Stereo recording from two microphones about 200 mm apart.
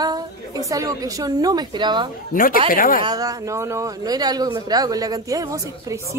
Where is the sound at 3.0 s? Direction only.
20° right (ahead or behind).